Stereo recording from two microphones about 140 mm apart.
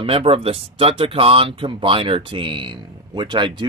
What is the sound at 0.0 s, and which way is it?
Speech, 40° right (ahead or behind).